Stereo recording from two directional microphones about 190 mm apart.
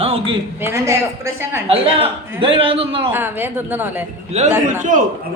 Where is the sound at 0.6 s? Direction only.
15° right (ahead or behind).